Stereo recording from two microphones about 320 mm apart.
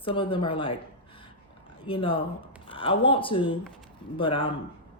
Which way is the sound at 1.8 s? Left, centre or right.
Centre.